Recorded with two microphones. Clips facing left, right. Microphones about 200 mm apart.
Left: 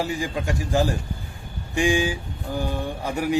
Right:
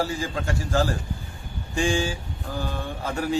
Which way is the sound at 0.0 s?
15° left (ahead or behind).